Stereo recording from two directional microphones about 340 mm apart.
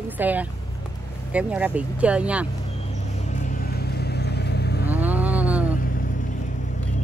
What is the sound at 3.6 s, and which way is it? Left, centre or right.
Vehicle, left.